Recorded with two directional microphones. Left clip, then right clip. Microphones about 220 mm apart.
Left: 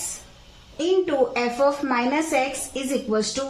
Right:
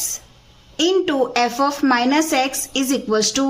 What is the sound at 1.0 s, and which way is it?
A woman's voice, 45° right (ahead or behind).